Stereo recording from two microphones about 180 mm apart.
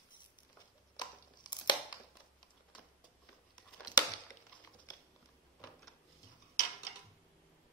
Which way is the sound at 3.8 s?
20° left (ahead or behind).